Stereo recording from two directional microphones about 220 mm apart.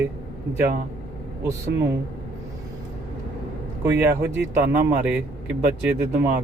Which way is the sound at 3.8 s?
10° right (ahead or behind).